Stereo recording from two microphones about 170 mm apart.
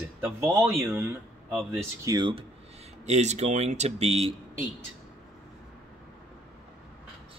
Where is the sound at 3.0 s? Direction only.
40° right (ahead or behind).